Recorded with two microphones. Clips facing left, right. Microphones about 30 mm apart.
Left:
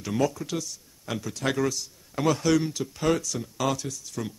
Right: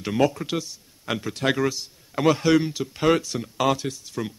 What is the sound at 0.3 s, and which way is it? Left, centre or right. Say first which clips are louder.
Speech: right 4 dB; right.